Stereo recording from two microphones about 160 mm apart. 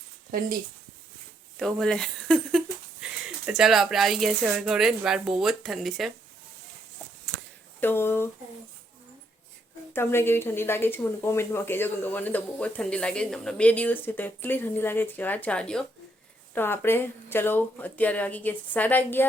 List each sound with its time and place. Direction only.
0.3 s speech: 65° right (ahead or behind)
1.5 s speech: centre (ahead or behind)
7.8 s speech: 15° left (ahead or behind)
9.9 s speech: 15° left (ahead or behind)